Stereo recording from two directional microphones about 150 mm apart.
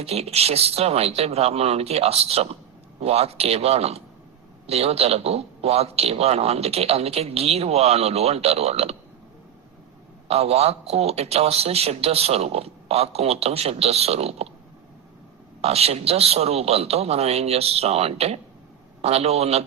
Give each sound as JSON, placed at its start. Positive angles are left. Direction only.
{"t": 0.0, "sound": "a man's voice", "side_deg": -45}
{"t": 10.2, "sound": "a man's voice", "side_deg": -45}
{"t": 15.6, "sound": "a man's voice", "side_deg": -45}